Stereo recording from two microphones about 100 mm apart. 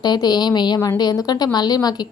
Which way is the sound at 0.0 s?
45° left (ahead or behind).